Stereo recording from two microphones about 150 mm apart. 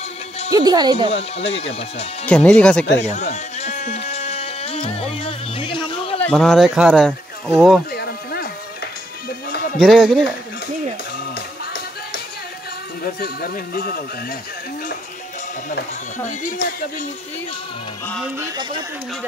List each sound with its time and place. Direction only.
0.5 s speech: 25° right (ahead or behind)
0.9 s speech: 40° left (ahead or behind)
2.2 s speech: 10° left (ahead or behind)
3.0 s music: 50° left (ahead or behind); by 6.1 s 35° left (ahead or behind)
6.2 s speech: 5° left (ahead or behind)
7.9 s music: 90° left
9.5 s music: 90° left
9.8 s speech: centre (ahead or behind)
11.3 s music: 90° left
13.0 s speech: 85° left
16.3 s speech: 65° left (ahead or behind)